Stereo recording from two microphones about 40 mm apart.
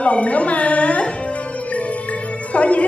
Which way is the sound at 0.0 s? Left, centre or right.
Left.